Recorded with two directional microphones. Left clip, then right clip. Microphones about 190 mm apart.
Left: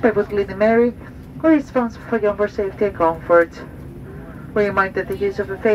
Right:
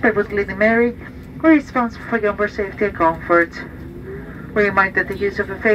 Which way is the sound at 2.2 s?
45° left (ahead or behind).